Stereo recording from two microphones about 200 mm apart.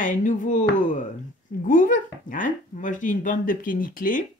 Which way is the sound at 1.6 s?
40° left (ahead or behind).